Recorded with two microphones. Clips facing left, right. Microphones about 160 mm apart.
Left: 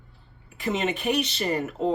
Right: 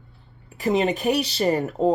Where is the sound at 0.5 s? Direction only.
40° right (ahead or behind).